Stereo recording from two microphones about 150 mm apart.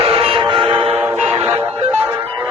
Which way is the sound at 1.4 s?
10° right (ahead or behind).